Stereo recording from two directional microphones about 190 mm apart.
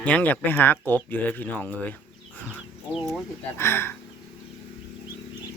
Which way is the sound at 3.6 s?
10° left (ahead or behind).